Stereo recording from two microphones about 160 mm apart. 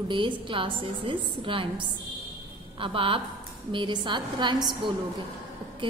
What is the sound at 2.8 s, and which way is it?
A woman's voice, 35° right (ahead or behind).